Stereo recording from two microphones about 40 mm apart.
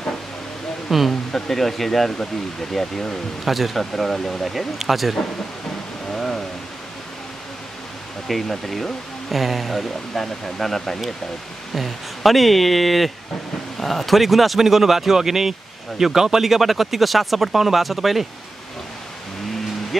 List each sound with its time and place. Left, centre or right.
0.8 s speech: centre
3.4 s speech: centre
6.1 s a sound: centre
8.3 s speech: centre